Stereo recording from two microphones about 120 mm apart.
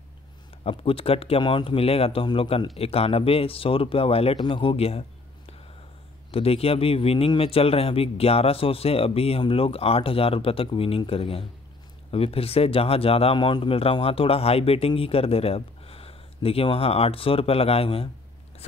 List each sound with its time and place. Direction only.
0.7 s speech: 50° left (ahead or behind)
6.3 s speech: 55° left (ahead or behind)